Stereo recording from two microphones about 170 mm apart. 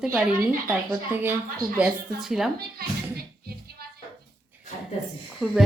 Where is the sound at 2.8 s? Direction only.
65° right (ahead or behind).